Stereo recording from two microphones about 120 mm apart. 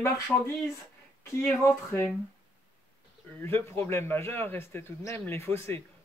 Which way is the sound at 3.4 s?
20° left (ahead or behind).